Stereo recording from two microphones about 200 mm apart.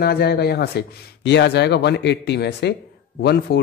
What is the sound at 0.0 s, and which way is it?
Speech, 50° left (ahead or behind).